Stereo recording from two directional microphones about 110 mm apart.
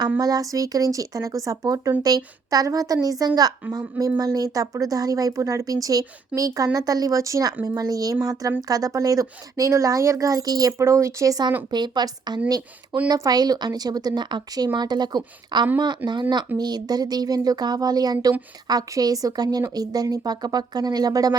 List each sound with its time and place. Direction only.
0.2 s speech: 35° right (ahead or behind)
16.0 s speech: 20° right (ahead or behind)
16.6 s speech: 40° right (ahead or behind)